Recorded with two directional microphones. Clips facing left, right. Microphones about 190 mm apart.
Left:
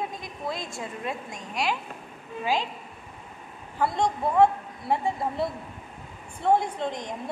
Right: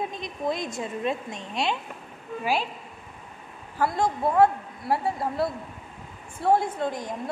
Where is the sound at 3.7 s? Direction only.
5° right (ahead or behind).